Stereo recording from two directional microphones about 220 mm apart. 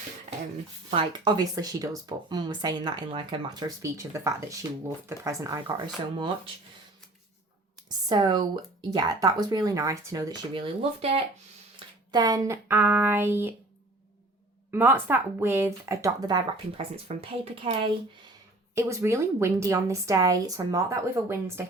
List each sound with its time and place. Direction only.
0.9 s speech: 20° right (ahead or behind)
7.9 s speech: 20° right (ahead or behind)
11.8 s a sound: 20° right (ahead or behind)
12.1 s speech: 15° right (ahead or behind)
14.7 s speech: 10° right (ahead or behind)
18.7 s speech: 10° right (ahead or behind)